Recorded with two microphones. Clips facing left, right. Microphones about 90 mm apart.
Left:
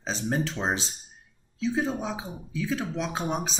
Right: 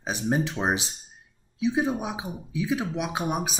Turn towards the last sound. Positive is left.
turn(degrees=-10)  # may be behind; listen again after turning